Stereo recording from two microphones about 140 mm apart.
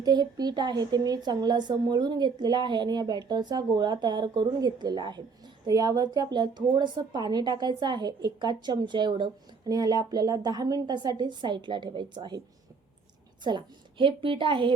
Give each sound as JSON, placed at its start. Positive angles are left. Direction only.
{"t": 0.0, "sound": "a woman's voice", "side_deg": -30}
{"t": 13.4, "sound": "a woman's voice", "side_deg": -35}